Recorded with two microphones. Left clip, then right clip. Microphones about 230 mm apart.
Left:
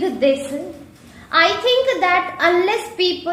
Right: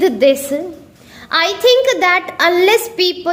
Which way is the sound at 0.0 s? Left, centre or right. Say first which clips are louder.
Right 6 dB; right.